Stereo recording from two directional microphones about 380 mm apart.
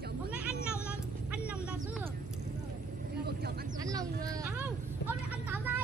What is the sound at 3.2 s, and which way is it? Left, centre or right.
Vehicle, right.